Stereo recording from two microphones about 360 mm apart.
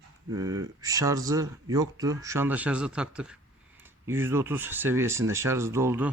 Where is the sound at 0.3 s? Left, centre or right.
Centre.